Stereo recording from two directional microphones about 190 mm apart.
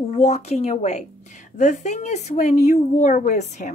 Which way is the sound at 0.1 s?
35° left (ahead or behind).